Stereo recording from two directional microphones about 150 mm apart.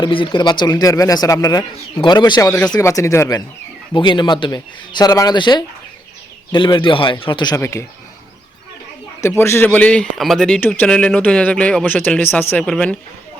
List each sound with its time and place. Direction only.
0.0 s speech: 35° left (ahead or behind)
3.9 s a man's voice: 30° left (ahead or behind)
7.5 s speech: 20° left (ahead or behind)
9.2 s a man's voice: 15° left (ahead or behind)